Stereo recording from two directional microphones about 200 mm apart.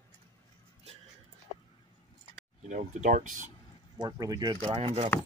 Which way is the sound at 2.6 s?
35° right (ahead or behind).